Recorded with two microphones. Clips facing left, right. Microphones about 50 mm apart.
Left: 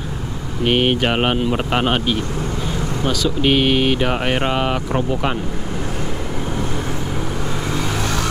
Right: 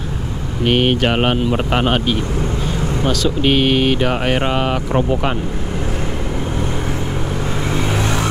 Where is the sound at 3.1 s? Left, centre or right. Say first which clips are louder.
Right 1 dB; centre.